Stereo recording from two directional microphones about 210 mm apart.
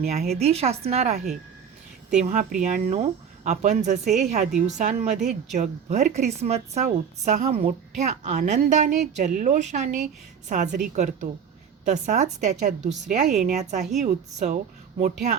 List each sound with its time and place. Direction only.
0.0 s a woman's voice: 30° right (ahead or behind)